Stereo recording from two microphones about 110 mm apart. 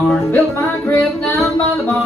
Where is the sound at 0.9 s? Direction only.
25° left (ahead or behind).